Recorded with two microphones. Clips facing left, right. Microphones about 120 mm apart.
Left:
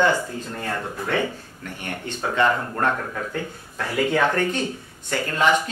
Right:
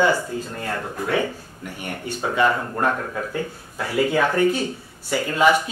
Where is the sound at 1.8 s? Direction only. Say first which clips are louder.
Right 2 dB; 10° right (ahead or behind).